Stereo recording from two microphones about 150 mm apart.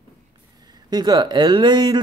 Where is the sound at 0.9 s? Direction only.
25° right (ahead or behind).